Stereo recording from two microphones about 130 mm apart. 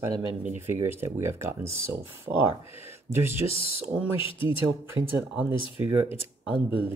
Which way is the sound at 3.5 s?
45° left (ahead or behind).